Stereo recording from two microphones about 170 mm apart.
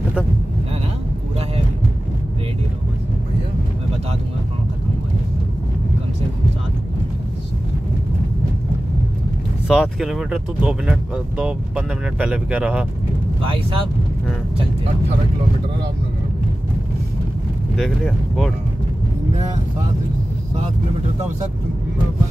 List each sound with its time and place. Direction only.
9.7 s speech: centre (ahead or behind)
13.4 s speech: 30° right (ahead or behind)
17.7 s speech: centre (ahead or behind)